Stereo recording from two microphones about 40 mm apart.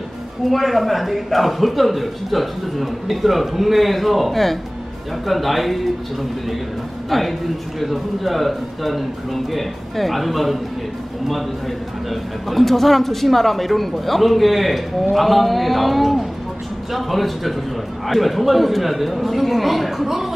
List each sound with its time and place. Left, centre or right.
0.5 s a man's voice: centre
7.1 s a man's voice: centre
12.1 s a man's voice: centre